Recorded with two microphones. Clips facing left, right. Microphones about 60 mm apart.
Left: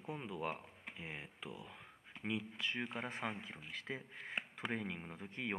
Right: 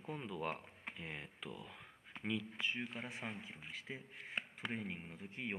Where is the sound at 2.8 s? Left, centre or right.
Left.